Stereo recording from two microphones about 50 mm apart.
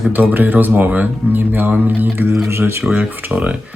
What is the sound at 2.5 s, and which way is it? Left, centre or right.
Speech, right.